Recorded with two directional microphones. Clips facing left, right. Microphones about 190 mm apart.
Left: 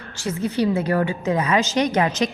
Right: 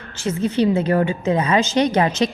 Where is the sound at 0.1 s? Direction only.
20° right (ahead or behind).